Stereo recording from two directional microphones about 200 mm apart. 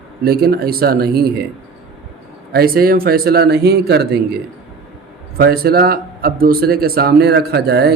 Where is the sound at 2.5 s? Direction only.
50° right (ahead or behind).